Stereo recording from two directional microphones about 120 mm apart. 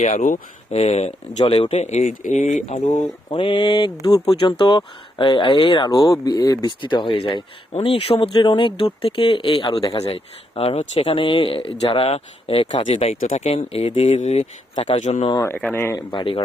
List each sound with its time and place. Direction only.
0.0 s speech: 90° left; by 3.1 s 70° left (ahead or behind)
3.2 s speech: 45° left (ahead or behind)
5.9 s speech: 30° left (ahead or behind)
7.7 s speech: 55° left (ahead or behind); by 15.3 s 80° left
15.5 s speech: 15° left (ahead or behind)
16.1 s speech: 45° left (ahead or behind)